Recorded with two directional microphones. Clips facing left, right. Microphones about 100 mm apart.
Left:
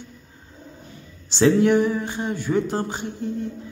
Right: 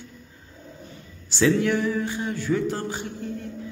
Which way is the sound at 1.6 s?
20° left (ahead or behind).